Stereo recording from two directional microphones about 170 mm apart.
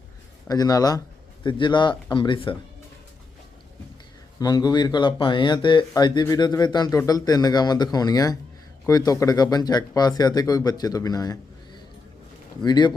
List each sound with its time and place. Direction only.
0.4 s speech: 20° left (ahead or behind)
4.4 s speech: 20° left (ahead or behind)
12.6 s speech: 25° left (ahead or behind)